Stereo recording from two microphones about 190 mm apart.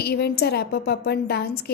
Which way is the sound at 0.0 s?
55° left (ahead or behind).